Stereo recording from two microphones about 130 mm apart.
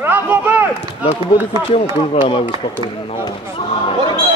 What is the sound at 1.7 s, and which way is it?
Speech, 50° left (ahead or behind).